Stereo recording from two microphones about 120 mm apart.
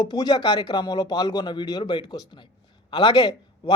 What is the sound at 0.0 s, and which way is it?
Speech, 35° left (ahead or behind).